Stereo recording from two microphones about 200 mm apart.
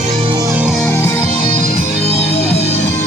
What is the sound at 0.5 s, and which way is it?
Music, 5° right (ahead or behind).